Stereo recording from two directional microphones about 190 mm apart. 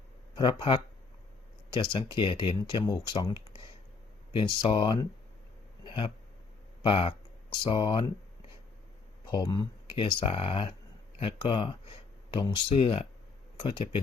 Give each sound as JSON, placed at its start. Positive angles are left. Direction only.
{"t": 1.7, "sound": "speech", "side_deg": 25}
{"t": 5.8, "sound": "a sound", "side_deg": 25}
{"t": 6.8, "sound": "speech", "side_deg": 30}
{"t": 9.2, "sound": "speech", "side_deg": 25}